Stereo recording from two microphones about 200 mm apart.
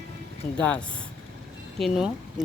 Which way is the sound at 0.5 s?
5° left (ahead or behind).